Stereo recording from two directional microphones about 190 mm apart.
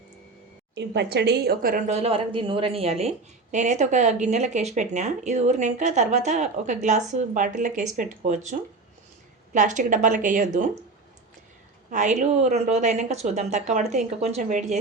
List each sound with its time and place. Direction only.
0.8 s a woman's voice: 65° right (ahead or behind); by 2.0 s 45° right (ahead or behind)
2.0 s a woman's voice: 30° right (ahead or behind)
11.9 s a woman's voice: 40° right (ahead or behind)